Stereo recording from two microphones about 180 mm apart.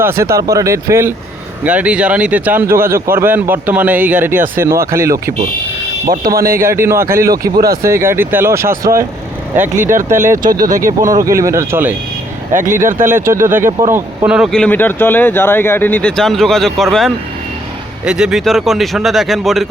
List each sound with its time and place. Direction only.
0.0 s speech: 15° right (ahead or behind)
6.1 s speech: 55° right (ahead or behind)
6.6 s speech: 15° right (ahead or behind)
7.5 s speech: 55° right (ahead or behind)
7.8 s speech: 15° right (ahead or behind)
9.9 s speech: 45° right (ahead or behind)
11.3 s speech: 15° right (ahead or behind)
12.5 s speech: 45° right (ahead or behind)
13.1 s speech: 15° right (ahead or behind)
14.3 s speech: 5° right (ahead or behind)